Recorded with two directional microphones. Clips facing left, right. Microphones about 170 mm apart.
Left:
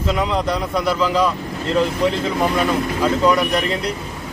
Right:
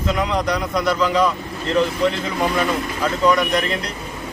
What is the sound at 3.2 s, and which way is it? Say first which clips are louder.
Speech: right 3 dB; 10° left (ahead or behind).